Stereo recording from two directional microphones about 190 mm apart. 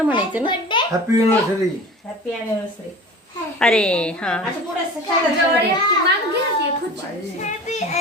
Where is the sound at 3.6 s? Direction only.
5° left (ahead or behind).